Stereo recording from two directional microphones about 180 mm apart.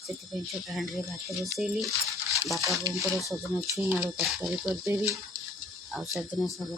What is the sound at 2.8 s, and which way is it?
Speech, 15° right (ahead or behind).